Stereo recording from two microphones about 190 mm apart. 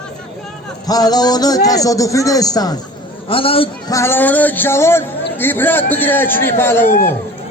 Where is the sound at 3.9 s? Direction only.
15° left (ahead or behind).